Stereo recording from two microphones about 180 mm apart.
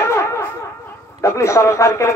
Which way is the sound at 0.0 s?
15° left (ahead or behind).